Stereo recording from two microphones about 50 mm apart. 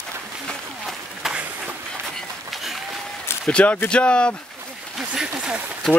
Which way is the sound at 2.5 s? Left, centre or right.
Centre.